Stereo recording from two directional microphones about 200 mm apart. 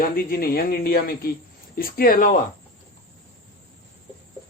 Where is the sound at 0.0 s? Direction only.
45° left (ahead or behind).